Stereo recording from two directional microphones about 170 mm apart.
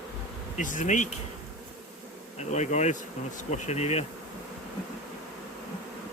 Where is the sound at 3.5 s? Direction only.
40° left (ahead or behind).